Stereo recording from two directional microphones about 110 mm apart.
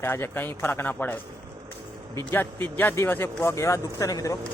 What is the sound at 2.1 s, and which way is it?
Speech, 20° left (ahead or behind).